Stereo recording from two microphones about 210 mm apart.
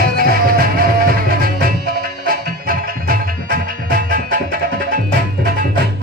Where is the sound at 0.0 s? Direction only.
45° right (ahead or behind).